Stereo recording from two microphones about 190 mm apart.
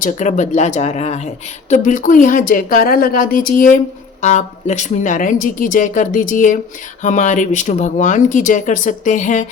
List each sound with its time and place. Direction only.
0.0 s a woman's voice: 40° left (ahead or behind)